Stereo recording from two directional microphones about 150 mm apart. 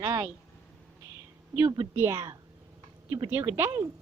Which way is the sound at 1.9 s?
15° right (ahead or behind).